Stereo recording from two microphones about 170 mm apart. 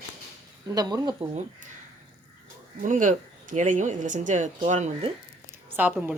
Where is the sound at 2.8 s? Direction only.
45° right (ahead or behind).